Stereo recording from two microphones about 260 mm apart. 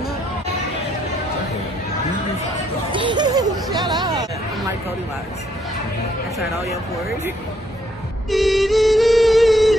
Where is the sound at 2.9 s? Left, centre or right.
Centre.